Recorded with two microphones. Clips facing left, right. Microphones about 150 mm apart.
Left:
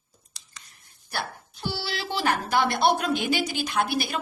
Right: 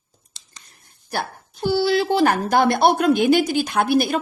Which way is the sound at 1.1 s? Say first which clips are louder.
Right 6 dB; 50° right (ahead or behind).